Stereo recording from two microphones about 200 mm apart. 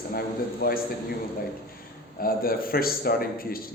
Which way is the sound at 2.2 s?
45° left (ahead or behind).